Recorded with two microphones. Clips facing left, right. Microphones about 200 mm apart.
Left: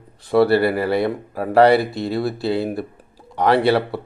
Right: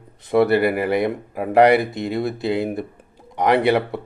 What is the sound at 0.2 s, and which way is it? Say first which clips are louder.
Speech: left 1 dB; 20° right (ahead or behind).